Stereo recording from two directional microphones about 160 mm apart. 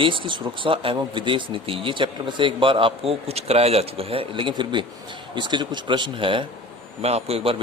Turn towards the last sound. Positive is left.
turn(degrees=-35)  # may be behind; listen again after turning